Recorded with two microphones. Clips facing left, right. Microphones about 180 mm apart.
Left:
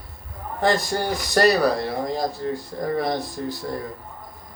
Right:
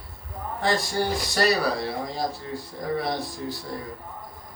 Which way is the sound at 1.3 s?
45° left (ahead or behind).